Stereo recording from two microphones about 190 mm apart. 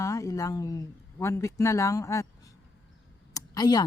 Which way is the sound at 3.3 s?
20° left (ahead or behind).